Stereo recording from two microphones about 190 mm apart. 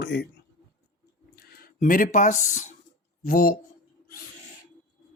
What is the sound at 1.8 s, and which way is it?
Speech, 45° left (ahead or behind).